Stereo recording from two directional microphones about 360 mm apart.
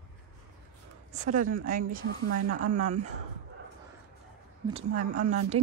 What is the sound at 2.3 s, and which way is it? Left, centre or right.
Speech, right.